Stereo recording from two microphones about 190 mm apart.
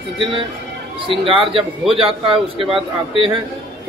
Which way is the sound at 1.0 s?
25° right (ahead or behind).